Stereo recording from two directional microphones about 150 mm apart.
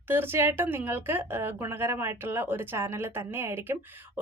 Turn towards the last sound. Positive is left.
turn(degrees=-15)  # may be behind; listen again after turning